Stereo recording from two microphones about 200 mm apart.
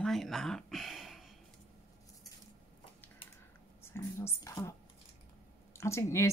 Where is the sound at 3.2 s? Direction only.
25° left (ahead or behind).